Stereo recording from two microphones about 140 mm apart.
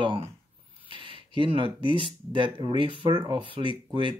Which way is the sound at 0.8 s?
35° right (ahead or behind).